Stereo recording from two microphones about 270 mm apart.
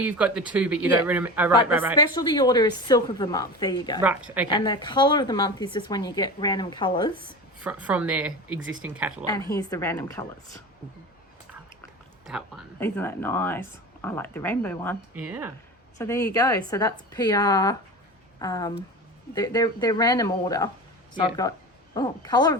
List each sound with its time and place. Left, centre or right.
0.0 s speech: centre
2.1 s a woman's voice: centre
4.0 s speech: centre
4.4 s a woman's voice: centre
7.6 s speech: centre
9.6 s a woman's voice: centre
12.8 s a woman's voice: centre
15.2 s speech: centre
16.0 s a woman's voice: centre